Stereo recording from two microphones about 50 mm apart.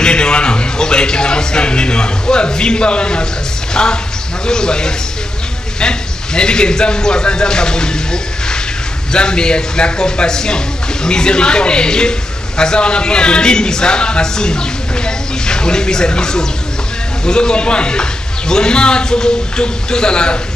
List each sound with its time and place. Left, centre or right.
0.0 s a man's voice: centre